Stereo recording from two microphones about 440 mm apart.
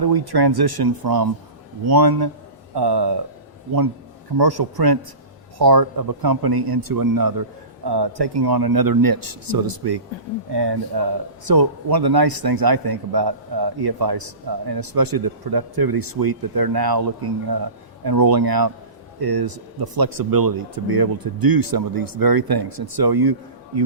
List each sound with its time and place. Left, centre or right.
0.0 s a man's voice: right
4.4 s a man's voice: right
7.9 s a man's voice: right